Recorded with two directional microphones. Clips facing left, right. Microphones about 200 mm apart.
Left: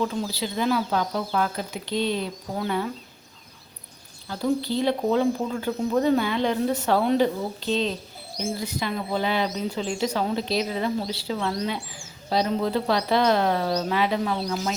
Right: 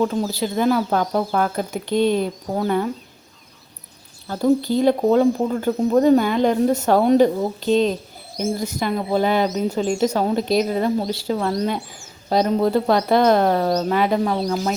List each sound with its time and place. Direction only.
0.0 s speech: 45° right (ahead or behind)
4.3 s speech: 45° right (ahead or behind)